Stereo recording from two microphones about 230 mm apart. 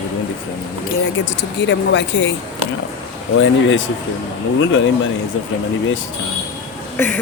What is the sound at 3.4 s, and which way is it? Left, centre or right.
Speech, left.